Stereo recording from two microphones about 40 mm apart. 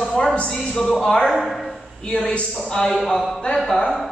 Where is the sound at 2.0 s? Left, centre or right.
Centre.